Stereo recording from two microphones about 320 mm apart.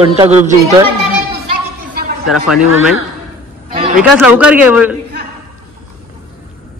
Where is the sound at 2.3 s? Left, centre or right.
Left.